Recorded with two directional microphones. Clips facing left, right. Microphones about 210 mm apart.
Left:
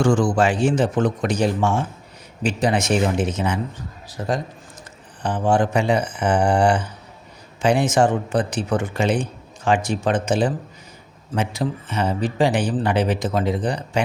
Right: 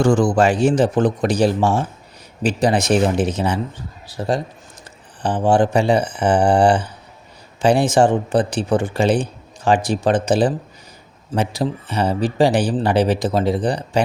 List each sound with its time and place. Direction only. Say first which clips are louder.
0.0 s speech: right 3 dB; 40° right (ahead or behind)